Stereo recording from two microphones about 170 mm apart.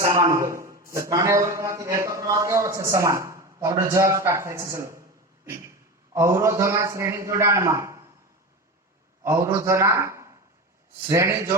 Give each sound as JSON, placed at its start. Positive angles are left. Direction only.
{"t": 0.0, "sound": "a man's voice", "side_deg": -20}
{"t": 6.1, "sound": "a man's voice", "side_deg": -15}
{"t": 9.2, "sound": "a man's voice", "side_deg": -15}